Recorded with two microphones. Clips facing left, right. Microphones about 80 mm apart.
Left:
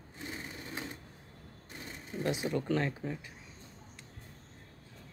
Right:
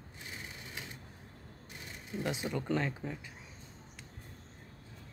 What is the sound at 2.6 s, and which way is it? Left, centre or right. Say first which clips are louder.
Speech: left 2 dB; centre.